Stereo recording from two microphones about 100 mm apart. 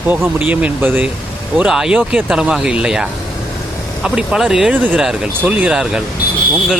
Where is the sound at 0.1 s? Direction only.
15° right (ahead or behind).